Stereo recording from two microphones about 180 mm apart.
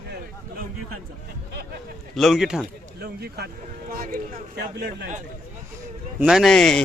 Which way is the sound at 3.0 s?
60° right (ahead or behind).